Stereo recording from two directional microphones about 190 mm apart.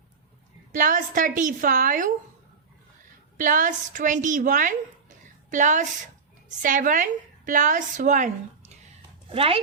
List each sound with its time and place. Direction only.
0.7 s a woman's voice: 45° right (ahead or behind)
3.3 s a woman's voice: 45° right (ahead or behind)